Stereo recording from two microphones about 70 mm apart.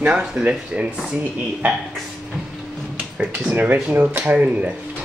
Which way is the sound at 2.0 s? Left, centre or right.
Centre.